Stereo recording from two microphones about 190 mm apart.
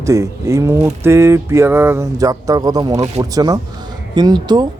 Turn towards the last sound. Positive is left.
turn(degrees=-20)  # may be behind; listen again after turning